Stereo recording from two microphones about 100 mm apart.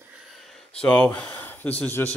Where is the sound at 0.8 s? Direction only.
15° left (ahead or behind).